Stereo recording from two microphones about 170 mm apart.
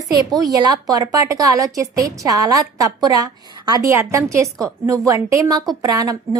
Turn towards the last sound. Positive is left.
turn(degrees=-20)  # may be behind; listen again after turning